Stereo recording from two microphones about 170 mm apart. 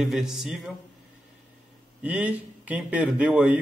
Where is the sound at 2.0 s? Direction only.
10° right (ahead or behind).